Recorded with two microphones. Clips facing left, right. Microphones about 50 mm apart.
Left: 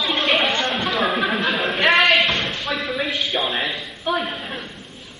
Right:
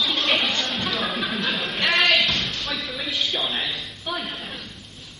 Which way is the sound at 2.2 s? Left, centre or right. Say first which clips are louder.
Left 4 dB; left.